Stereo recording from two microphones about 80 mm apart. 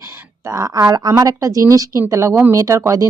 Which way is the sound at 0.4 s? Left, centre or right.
Right.